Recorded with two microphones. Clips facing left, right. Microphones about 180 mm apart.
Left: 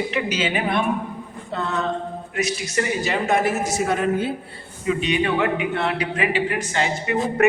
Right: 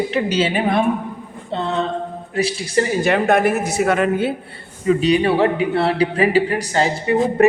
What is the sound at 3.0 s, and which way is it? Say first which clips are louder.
Speech: right 5 dB; 60° right (ahead or behind).